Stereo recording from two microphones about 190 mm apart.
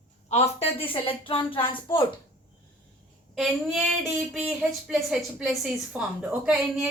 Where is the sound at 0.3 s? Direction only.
35° left (ahead or behind).